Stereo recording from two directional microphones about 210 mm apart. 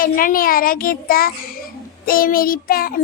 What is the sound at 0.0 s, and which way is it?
Child singing, 45° left (ahead or behind).